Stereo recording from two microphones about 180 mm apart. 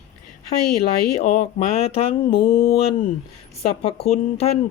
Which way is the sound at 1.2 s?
40° left (ahead or behind).